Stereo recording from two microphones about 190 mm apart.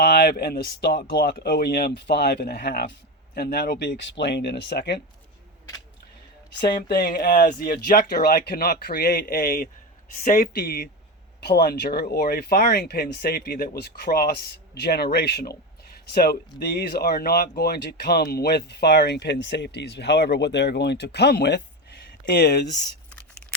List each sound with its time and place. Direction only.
0.0 s speech: 55° left (ahead or behind)
6.6 s speech: 55° left (ahead or behind)